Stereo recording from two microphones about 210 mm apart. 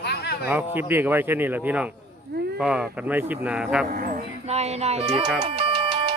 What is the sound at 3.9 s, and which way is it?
Speech, 40° right (ahead or behind).